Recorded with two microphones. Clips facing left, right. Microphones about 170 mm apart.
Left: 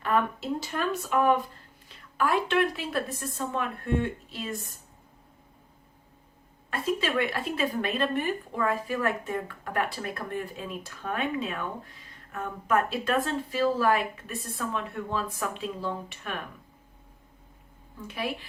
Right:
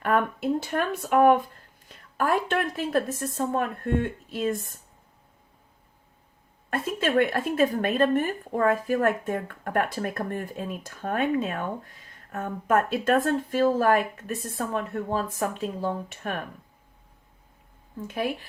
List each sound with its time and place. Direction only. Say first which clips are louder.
0.0 s speech: right 3 dB; 50° right (ahead or behind)
6.7 s speech: right 2 dB; 50° right (ahead or behind)
18.1 s speech: right 4 dB; 45° right (ahead or behind)